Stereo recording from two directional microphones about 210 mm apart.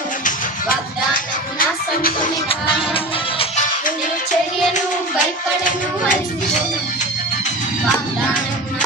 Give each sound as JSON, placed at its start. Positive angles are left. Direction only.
{"t": 0.3, "sound": "music", "side_deg": 40}
{"t": 2.5, "sound": "music", "side_deg": 25}
{"t": 5.6, "sound": "a sound", "side_deg": 35}